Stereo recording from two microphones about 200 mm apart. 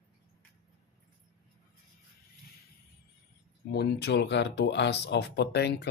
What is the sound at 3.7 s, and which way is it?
Speech, 55° left (ahead or behind).